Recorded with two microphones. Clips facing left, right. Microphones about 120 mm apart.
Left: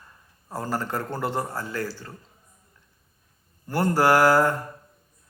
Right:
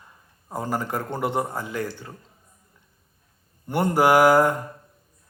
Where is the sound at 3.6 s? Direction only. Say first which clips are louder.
Right 1 dB; 20° right (ahead or behind).